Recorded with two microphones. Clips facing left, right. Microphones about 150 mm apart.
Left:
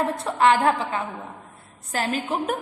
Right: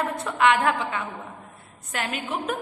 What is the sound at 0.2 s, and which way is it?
A woman's voice, 35° left (ahead or behind).